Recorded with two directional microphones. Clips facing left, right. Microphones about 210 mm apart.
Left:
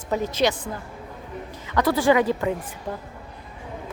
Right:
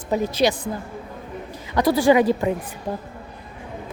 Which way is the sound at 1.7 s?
15° right (ahead or behind).